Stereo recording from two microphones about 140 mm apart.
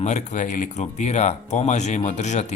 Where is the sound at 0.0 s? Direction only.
55° left (ahead or behind).